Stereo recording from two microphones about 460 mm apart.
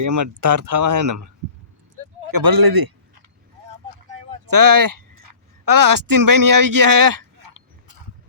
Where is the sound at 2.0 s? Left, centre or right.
Right.